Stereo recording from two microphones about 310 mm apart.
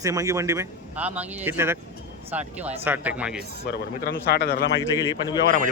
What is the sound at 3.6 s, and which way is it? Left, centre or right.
Speech, left.